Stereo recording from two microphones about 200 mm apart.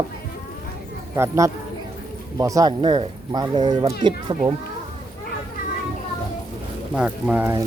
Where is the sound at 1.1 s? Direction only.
15° right (ahead or behind).